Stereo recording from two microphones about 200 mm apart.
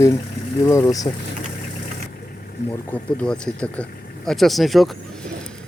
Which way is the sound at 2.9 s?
5° left (ahead or behind).